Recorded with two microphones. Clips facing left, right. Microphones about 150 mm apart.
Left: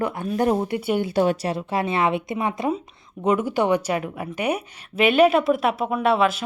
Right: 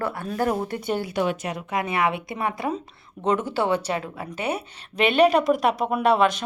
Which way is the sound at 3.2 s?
10° left (ahead or behind).